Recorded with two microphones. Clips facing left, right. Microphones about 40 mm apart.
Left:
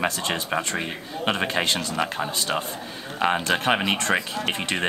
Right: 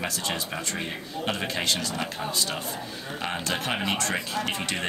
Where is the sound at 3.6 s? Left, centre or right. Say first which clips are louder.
Left 5 dB; left.